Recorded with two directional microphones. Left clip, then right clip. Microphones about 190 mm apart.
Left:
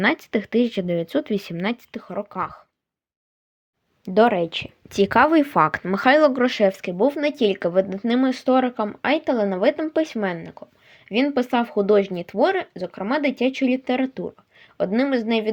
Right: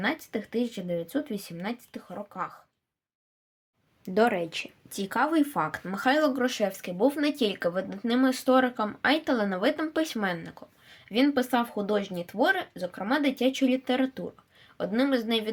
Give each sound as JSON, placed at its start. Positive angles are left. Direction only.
{"t": 0.0, "sound": "speech", "side_deg": 45}
{"t": 4.0, "sound": "speech", "side_deg": 25}
{"t": 4.9, "sound": "speech", "side_deg": 40}